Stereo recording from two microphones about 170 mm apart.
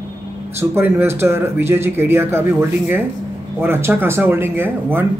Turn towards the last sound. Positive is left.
turn(degrees=-10)  # may be behind; listen again after turning